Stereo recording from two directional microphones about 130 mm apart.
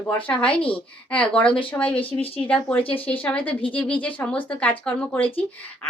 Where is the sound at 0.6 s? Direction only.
10° left (ahead or behind).